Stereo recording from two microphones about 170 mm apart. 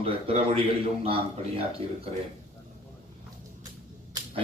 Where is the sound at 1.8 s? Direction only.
35° right (ahead or behind).